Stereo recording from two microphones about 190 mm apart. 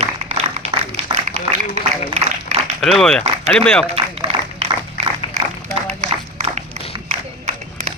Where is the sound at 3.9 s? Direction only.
30° right (ahead or behind).